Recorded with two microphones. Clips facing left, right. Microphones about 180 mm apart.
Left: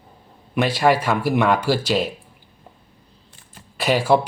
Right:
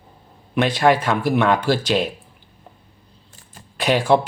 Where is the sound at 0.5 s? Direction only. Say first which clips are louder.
Right 1 dB; 5° left (ahead or behind).